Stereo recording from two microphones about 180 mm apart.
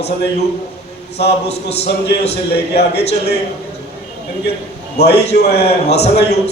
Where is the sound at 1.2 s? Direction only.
65° left (ahead or behind).